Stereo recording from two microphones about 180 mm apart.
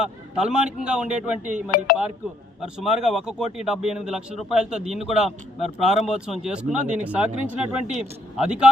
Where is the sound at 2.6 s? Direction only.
5° right (ahead or behind).